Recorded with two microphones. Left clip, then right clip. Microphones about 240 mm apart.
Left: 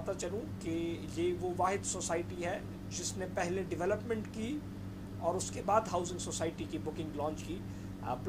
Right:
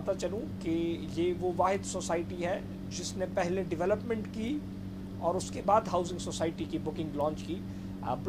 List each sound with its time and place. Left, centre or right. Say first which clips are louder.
0.2 s speech: right 4 dB; centre